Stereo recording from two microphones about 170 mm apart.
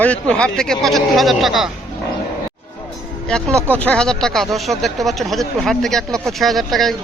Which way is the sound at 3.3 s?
5° left (ahead or behind).